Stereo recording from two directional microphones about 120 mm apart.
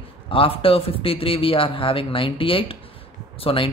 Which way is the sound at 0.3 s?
50° left (ahead or behind).